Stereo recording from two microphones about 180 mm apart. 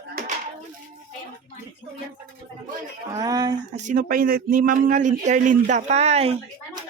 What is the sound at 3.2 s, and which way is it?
Speech, 20° right (ahead or behind).